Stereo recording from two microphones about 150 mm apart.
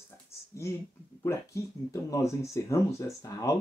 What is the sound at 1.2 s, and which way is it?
Speech, 20° left (ahead or behind).